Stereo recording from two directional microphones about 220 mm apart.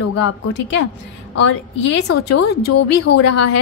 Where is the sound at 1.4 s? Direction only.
55° left (ahead or behind).